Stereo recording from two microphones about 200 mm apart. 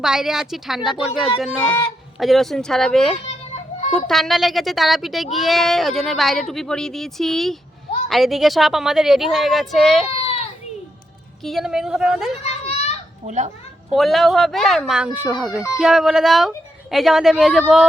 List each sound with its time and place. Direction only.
0.0 s speech: 5° right (ahead or behind)
11.4 s speech: centre (ahead or behind)
12.4 s children playing: 30° left (ahead or behind)
13.2 s speech: 35° right (ahead or behind)
13.9 s speech: centre (ahead or behind)